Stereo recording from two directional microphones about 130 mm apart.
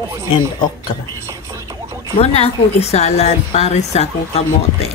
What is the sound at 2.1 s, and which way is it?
A woman's voice, 50° left (ahead or behind).